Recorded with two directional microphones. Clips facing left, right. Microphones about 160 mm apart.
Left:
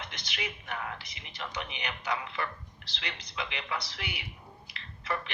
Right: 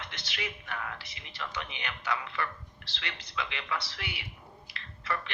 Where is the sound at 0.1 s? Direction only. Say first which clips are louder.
Even; 15° left (ahead or behind).